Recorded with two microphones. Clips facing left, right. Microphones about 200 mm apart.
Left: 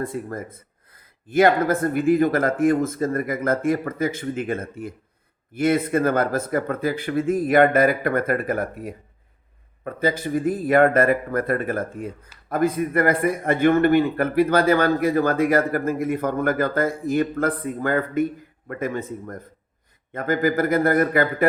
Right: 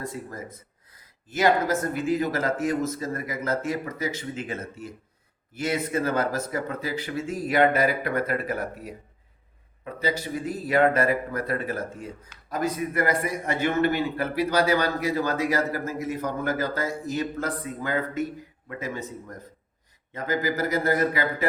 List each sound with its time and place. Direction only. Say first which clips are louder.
0.0 s a man's voice: left 6 dB; 55° left (ahead or behind)